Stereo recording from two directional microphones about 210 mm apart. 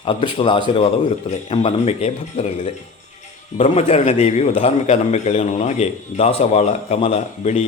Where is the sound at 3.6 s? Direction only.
30° left (ahead or behind).